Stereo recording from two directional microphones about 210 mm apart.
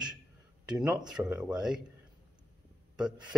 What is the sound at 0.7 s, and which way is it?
Speech, 5° right (ahead or behind).